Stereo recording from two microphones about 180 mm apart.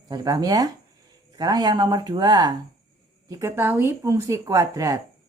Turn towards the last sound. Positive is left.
turn(degrees=-20)  # may be behind; listen again after turning